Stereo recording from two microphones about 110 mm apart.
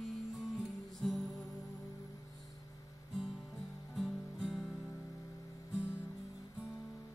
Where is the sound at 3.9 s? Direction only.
Centre (ahead or behind).